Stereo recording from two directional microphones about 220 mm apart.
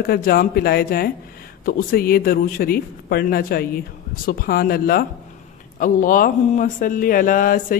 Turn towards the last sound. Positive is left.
turn(degrees=40)  # may be behind; listen again after turning